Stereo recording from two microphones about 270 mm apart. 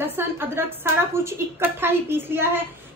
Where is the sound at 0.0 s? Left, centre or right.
Centre.